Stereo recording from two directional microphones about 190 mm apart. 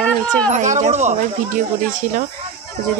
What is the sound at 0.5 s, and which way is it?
Speech, 40° right (ahead or behind).